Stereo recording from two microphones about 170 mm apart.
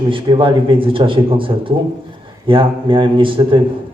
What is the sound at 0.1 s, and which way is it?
A man's voice, 30° right (ahead or behind).